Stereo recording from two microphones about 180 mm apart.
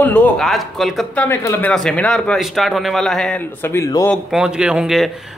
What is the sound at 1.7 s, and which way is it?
A man's voice, 5° left (ahead or behind).